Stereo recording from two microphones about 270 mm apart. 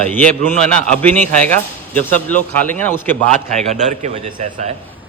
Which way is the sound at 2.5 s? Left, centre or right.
Centre.